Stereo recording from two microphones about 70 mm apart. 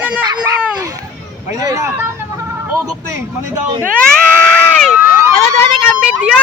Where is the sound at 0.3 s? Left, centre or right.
Right.